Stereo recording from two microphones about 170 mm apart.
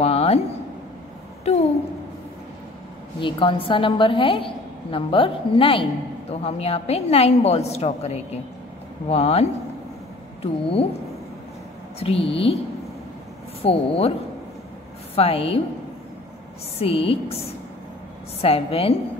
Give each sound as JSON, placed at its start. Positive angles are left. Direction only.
{"t": 0.0, "sound": "a sound", "side_deg": 35}
{"t": 3.2, "sound": "a woman's voice", "side_deg": 30}
{"t": 12.0, "sound": "a woman's voice", "side_deg": 35}
{"t": 13.6, "sound": "a woman's voice", "side_deg": 35}
{"t": 15.1, "sound": "a woman's voice", "side_deg": 35}
{"t": 16.8, "sound": "a woman's voice", "side_deg": 35}
{"t": 18.4, "sound": "a woman's voice", "side_deg": 35}